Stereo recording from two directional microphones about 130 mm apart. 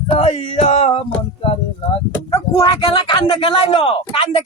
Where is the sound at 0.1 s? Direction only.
55° left (ahead or behind).